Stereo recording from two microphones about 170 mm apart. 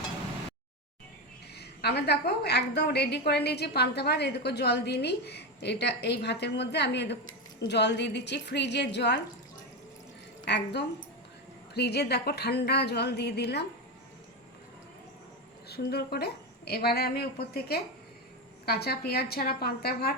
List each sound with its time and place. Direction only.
1.5 s a woman's voice: 75° left (ahead or behind); by 9.2 s 90° left
10.4 s a woman's voice: 80° left
15.7 s a woman's voice: 70° left (ahead or behind)